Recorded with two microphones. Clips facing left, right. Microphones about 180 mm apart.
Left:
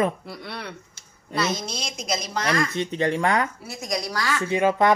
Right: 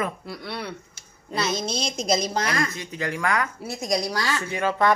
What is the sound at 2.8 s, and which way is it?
Speech, 25° left (ahead or behind).